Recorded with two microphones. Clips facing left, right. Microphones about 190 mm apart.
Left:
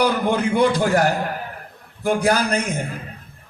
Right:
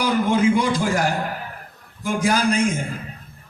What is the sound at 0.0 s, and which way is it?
A man's voice, 60° left (ahead or behind).